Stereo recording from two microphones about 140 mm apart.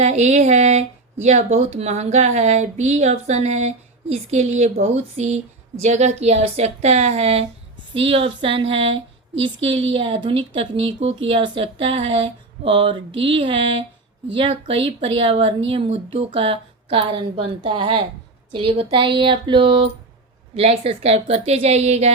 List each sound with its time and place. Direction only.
0.0 s a woman's voice: 55° right (ahead or behind)